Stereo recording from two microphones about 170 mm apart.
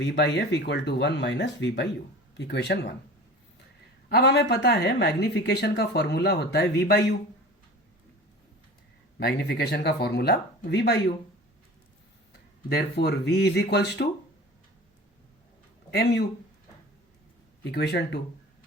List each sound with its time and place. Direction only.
0.0 s speech: 90° left
4.1 s speech: 85° left
9.1 s speech: 75° left (ahead or behind)
12.6 s speech: 70° left (ahead or behind)
15.9 s speech: 75° left (ahead or behind)
17.6 s speech: 80° left